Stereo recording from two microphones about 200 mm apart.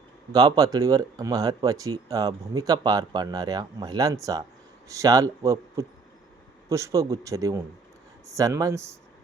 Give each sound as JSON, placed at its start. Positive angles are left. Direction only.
{"t": 0.3, "sound": "speech", "side_deg": -20}